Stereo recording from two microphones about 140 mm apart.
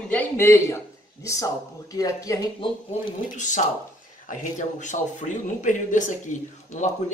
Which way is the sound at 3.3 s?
60° left (ahead or behind).